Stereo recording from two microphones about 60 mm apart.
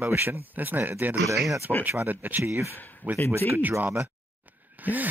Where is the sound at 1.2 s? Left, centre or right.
Right.